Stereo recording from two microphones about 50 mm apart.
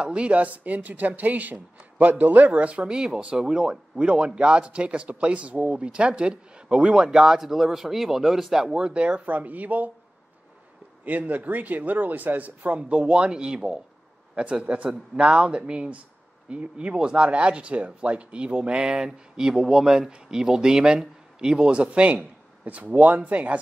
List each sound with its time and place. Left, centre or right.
0.0 s speech: right; by 8.7 s centre
8.7 s speech: right
11.1 s speech: right